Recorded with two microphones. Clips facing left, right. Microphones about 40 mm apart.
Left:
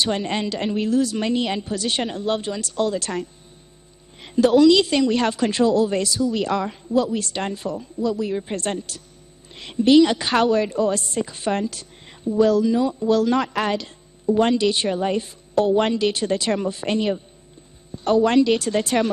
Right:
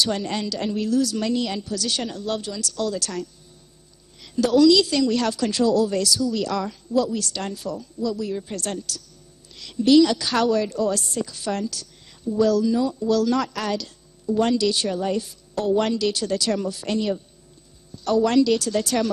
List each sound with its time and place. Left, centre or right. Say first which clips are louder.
0.0 s a woman's voice: left 2 dB; left